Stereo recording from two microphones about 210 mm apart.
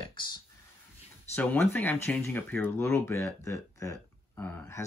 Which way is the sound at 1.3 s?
5° left (ahead or behind).